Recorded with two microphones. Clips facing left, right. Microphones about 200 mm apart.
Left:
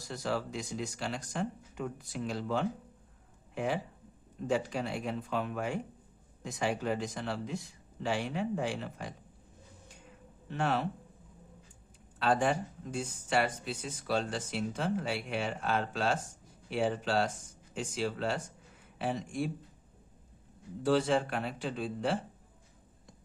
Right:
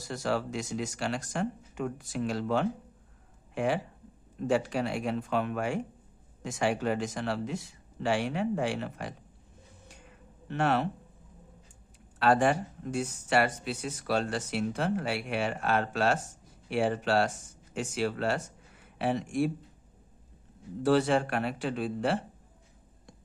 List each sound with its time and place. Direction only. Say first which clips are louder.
0.0 s speech: right 4 dB; 75° right (ahead or behind)
10.5 s speech: right 4 dB; 70° right (ahead or behind)
12.2 s speech: right 4 dB; 70° right (ahead or behind)
20.8 s speech: right 3 dB; 65° right (ahead or behind)